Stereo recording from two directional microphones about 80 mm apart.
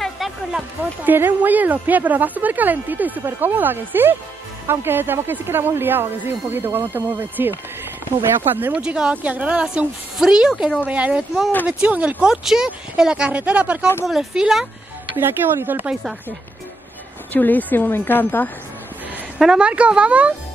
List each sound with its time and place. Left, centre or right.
0.0 s a sound: centre
1.0 s a woman's voice: right
8.8 s speech: centre
15.1 s a woman's voice: right
15.9 s speech: centre
17.3 s a woman's voice: left
19.3 s speech: centre